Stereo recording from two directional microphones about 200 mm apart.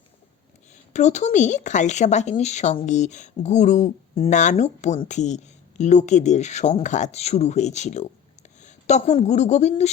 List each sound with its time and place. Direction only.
0.7 s speech: 35° left (ahead or behind)